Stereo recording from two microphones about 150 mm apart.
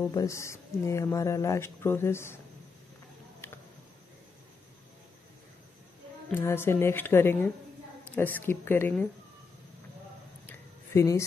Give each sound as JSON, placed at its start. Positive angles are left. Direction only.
{"t": 0.1, "sound": "speech", "side_deg": 20}
{"t": 6.3, "sound": "speech", "side_deg": 15}
{"t": 10.4, "sound": "a sound", "side_deg": 20}